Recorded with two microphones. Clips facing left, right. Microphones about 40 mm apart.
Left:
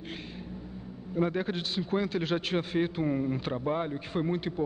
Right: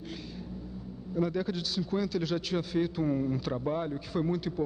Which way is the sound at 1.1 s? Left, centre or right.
Left.